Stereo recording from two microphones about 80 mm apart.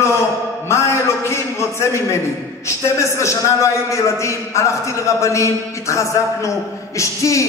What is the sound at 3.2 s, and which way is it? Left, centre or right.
A man's voice, left.